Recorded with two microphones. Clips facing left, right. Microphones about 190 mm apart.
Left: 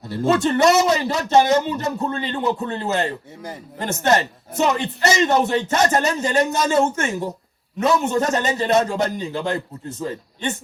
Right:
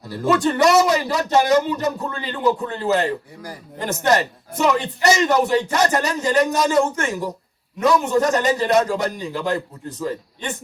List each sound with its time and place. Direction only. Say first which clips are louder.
0.1 s a man's voice: left 1 dB; 25° left (ahead or behind)